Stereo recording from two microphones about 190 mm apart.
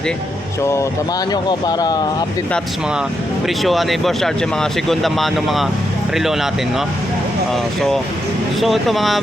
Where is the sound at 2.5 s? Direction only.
5° right (ahead or behind).